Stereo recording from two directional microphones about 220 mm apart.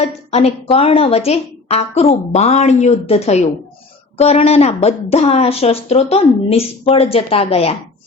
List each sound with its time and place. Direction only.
0.0 s a woman's voice: 30° left (ahead or behind)